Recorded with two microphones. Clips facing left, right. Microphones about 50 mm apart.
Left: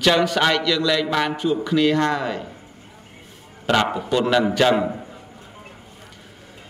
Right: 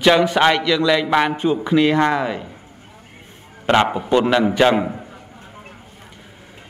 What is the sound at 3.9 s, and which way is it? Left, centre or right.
Speech, right.